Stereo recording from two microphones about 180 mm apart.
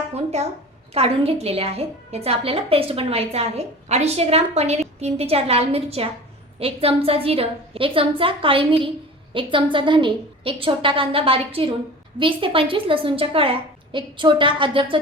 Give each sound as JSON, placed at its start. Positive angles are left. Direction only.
{"t": 0.1, "sound": "a woman's voice", "side_deg": -35}